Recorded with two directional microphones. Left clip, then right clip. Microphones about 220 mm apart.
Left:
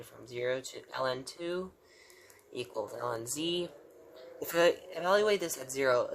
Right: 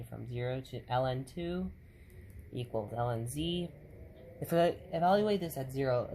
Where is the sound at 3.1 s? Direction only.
30° left (ahead or behind).